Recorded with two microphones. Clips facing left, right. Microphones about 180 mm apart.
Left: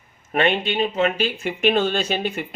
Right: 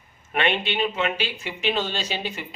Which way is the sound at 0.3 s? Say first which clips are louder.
Left 4 dB; 40° left (ahead or behind).